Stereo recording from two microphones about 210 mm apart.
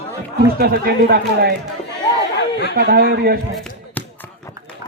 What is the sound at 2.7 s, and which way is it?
Speech, 45° right (ahead or behind).